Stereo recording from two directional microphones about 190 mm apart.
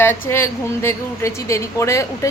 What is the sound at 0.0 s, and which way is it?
A woman's voice, 15° left (ahead or behind).